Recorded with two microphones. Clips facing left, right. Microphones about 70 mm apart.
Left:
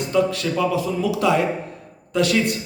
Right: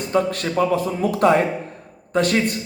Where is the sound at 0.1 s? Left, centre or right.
Right.